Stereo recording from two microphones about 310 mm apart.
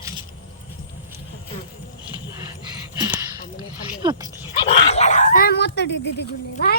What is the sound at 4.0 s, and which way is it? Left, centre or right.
Speech, centre.